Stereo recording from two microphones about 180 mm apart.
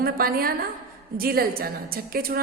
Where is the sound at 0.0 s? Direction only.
55° right (ahead or behind).